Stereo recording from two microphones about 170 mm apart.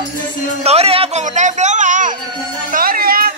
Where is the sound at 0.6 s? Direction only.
35° right (ahead or behind); by 3.3 s 60° right (ahead or behind).